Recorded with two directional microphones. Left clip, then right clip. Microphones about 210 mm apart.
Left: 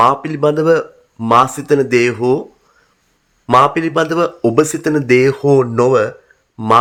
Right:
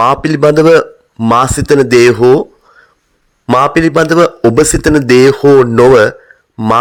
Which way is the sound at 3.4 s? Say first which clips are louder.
Right 2 dB; 35° right (ahead or behind).